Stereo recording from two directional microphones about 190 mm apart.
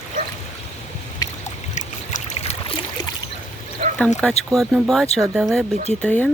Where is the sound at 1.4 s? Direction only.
40° left (ahead or behind).